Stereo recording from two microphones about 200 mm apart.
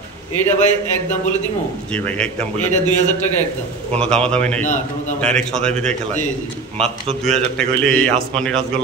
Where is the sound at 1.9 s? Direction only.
5° left (ahead or behind).